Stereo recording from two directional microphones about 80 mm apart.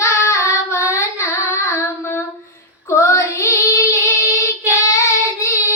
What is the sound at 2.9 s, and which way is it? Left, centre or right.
Child singing, left.